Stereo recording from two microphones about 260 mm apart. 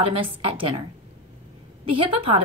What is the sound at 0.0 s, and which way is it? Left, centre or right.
Speech, right.